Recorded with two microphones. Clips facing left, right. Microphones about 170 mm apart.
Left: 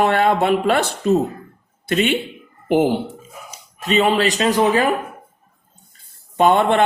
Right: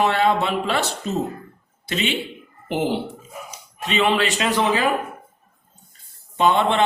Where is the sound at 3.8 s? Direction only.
40° left (ahead or behind).